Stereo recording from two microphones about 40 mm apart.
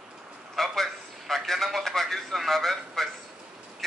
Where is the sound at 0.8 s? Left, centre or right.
Centre.